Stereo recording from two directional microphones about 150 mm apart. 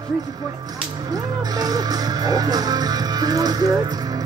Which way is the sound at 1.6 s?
25° right (ahead or behind).